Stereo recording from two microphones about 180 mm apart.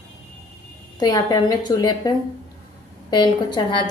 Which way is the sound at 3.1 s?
25° left (ahead or behind).